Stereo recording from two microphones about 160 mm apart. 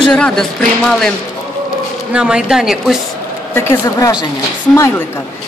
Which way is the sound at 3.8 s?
25° left (ahead or behind).